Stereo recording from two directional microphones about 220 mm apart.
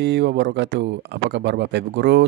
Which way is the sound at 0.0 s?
55° right (ahead or behind).